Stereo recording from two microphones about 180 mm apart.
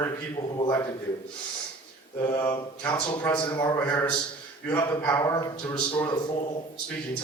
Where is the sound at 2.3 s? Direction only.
10° left (ahead or behind).